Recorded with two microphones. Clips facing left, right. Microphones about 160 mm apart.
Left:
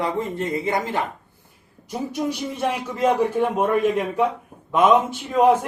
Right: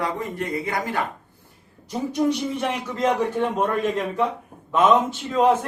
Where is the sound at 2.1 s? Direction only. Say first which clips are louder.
Right 6 dB; 5° left (ahead or behind).